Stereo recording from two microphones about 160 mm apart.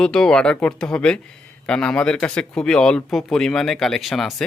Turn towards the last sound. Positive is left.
turn(degrees=0)  # may be behind; listen again after turning